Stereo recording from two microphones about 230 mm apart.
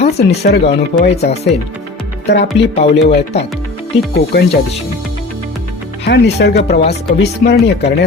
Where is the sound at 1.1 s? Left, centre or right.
Left.